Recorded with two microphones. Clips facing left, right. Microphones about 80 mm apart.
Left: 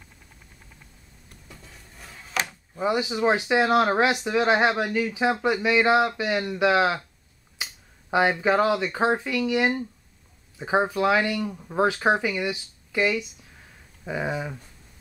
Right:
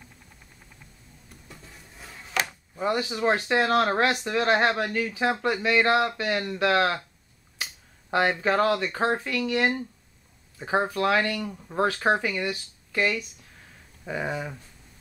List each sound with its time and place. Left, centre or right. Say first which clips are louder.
1.5 s a sound: even; centre
2.8 s speech: left 2 dB; centre
7.6 s finger snapping: even; centre
8.1 s speech: left 2 dB; centre